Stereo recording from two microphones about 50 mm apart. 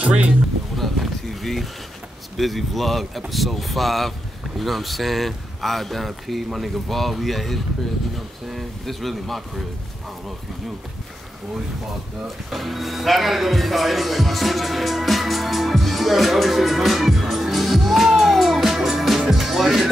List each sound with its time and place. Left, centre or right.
0.0 s speech: right
0.7 s speech: centre
12.4 s music: centre